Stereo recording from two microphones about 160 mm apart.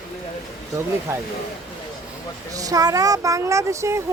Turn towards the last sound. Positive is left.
turn(degrees=-20)  # may be behind; listen again after turning